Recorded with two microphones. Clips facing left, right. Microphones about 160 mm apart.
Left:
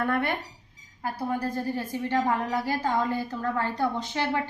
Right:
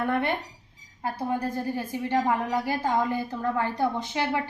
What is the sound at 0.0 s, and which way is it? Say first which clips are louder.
A woman's voice: right 1 dB; 20° right (ahead or behind).